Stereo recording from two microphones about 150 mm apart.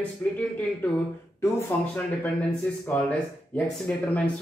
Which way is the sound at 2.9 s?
10° left (ahead or behind).